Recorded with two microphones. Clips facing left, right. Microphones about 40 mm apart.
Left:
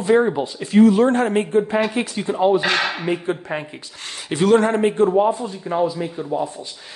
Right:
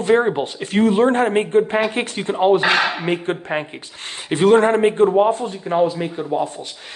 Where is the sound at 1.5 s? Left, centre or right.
Right.